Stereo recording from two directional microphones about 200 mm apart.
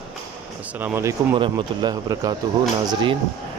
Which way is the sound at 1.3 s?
20° right (ahead or behind).